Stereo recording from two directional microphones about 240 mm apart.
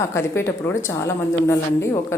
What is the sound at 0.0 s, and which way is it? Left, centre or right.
Speech, centre.